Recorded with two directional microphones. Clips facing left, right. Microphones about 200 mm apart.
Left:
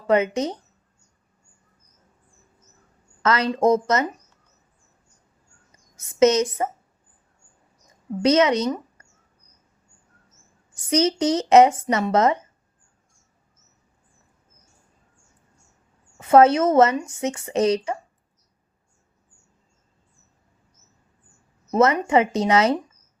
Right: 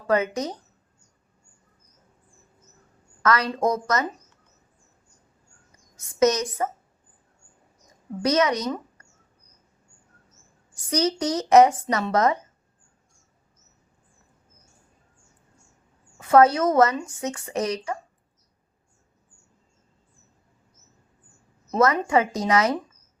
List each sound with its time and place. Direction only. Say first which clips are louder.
0.1 s a woman's voice: left 3 dB; 25° left (ahead or behind)
3.2 s a woman's voice: left 4 dB; 25° left (ahead or behind)
6.0 s a woman's voice: left 4 dB; 25° left (ahead or behind)
8.2 s a woman's voice: left 4 dB; 25° left (ahead or behind)
10.8 s a woman's voice: left 4 dB; 25° left (ahead or behind)
16.1 s a woman's voice: left 2 dB; 25° left (ahead or behind)
22.0 s a woman's voice: left 3 dB; 25° left (ahead or behind)